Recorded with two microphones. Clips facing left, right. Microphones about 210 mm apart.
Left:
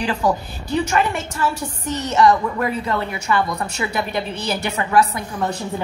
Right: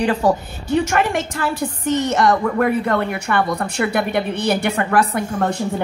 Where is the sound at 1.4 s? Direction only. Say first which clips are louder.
Right 2 dB; 65° right (ahead or behind).